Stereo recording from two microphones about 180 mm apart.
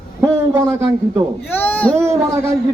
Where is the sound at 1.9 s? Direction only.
15° right (ahead or behind).